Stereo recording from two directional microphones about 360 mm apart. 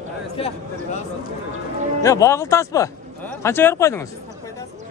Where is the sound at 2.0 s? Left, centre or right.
Centre.